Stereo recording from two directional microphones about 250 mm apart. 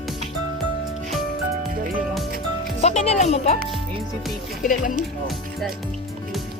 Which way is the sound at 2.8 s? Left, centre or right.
Left.